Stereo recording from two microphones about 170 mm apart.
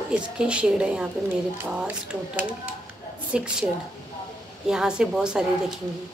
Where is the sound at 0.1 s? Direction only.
5° right (ahead or behind).